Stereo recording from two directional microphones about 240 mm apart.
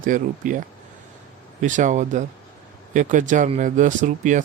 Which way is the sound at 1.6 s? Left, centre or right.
Right.